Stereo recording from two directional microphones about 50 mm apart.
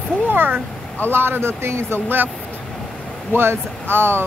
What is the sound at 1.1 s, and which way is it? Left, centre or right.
Speech, right.